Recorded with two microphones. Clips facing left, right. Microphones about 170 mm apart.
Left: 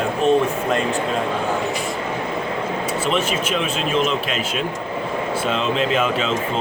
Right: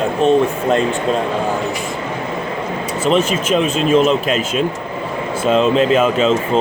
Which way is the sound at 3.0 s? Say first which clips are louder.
Right 8 dB; 45° right (ahead or behind).